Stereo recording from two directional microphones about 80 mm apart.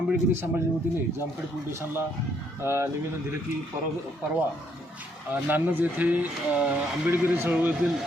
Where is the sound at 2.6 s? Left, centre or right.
Right.